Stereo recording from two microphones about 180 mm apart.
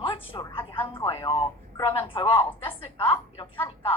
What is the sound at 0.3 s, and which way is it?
A woman's voice, 25° left (ahead or behind).